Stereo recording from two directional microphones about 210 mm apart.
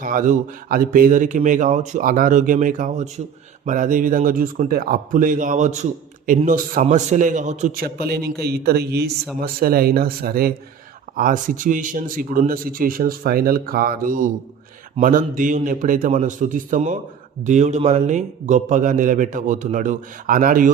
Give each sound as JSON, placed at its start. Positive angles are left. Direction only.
{"t": 0.0, "sound": "speech", "side_deg": -40}